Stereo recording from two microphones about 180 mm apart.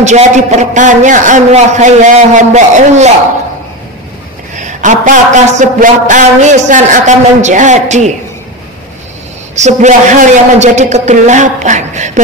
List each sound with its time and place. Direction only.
0.0 s a man's voice: 40° right (ahead or behind)
4.6 s a man's voice: 45° right (ahead or behind)
9.6 s a man's voice: 40° right (ahead or behind)